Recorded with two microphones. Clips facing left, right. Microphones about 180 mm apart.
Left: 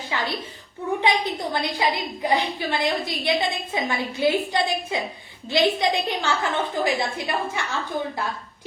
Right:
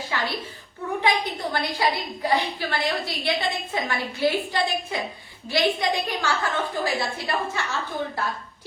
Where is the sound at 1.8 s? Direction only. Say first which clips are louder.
Right 1 dB; 20° left (ahead or behind).